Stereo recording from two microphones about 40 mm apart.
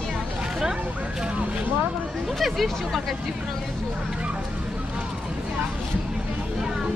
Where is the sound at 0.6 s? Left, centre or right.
Centre.